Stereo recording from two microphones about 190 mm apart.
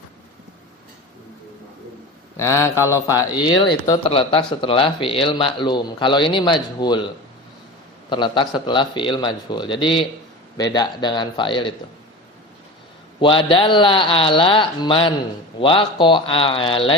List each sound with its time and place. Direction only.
2.4 s mantra: 15° left (ahead or behind)
3.8 s a man's voice: 20° left (ahead or behind)
8.1 s a man's voice: 25° left (ahead or behind)
13.1 s a man's voice: 25° left (ahead or behind)